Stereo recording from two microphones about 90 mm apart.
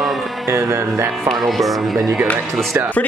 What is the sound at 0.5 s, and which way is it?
Music, 30° right (ahead or behind).